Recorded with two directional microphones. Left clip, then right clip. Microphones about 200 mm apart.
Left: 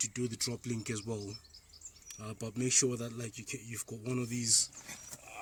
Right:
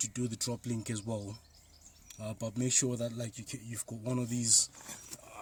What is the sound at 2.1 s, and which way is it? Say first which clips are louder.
Speech: right 3 dB; 30° right (ahead or behind).